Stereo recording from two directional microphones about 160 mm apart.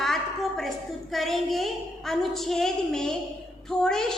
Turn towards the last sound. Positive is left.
turn(degrees=5)  # may be behind; listen again after turning